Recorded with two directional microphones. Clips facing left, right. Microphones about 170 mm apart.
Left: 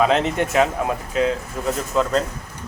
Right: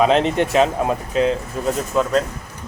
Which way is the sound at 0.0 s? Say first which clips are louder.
Right 2 dB; 20° right (ahead or behind).